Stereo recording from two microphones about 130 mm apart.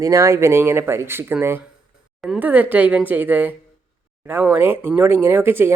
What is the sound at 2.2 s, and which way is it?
Speech, 5° right (ahead or behind).